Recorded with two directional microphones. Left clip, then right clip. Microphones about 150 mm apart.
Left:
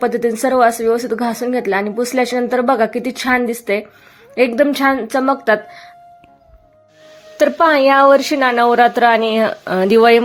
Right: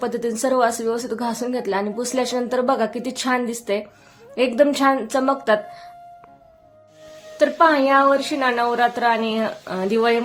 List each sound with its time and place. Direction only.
0.0 s speech: 25° left (ahead or behind)
7.3 s speech: 50° left (ahead or behind)